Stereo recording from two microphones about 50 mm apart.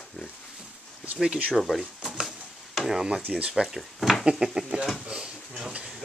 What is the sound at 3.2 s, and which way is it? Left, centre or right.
Speech, right.